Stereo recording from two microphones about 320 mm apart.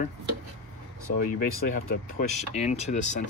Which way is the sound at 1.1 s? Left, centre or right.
Left.